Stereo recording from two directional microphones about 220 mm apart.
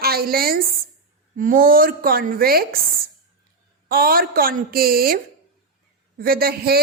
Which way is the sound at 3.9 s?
40° right (ahead or behind).